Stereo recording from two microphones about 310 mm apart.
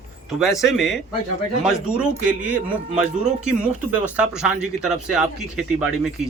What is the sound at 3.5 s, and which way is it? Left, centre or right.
Speech, centre.